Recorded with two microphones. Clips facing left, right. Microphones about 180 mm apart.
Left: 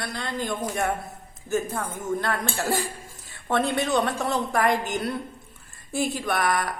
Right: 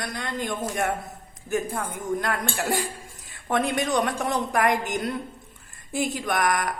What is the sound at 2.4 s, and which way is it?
A woman's voice, 15° right (ahead or behind).